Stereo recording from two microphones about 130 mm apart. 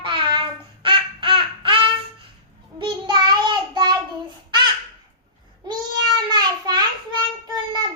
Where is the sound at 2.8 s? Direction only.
35° right (ahead or behind).